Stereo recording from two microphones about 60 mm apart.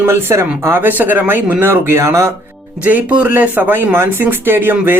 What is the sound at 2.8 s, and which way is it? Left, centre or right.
Speech, right.